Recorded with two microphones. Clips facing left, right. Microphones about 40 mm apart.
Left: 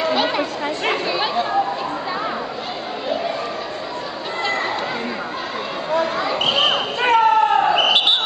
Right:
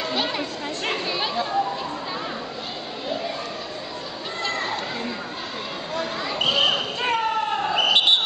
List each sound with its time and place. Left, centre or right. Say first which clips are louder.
0.0 s chatter: left 6 dB; centre
5.9 s basketball bounce: left 9 dB; centre